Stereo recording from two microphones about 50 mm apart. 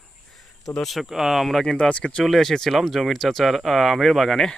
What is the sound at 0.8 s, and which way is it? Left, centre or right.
Speech, centre.